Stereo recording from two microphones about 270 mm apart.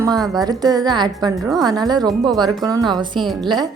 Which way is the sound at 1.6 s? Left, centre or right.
Centre.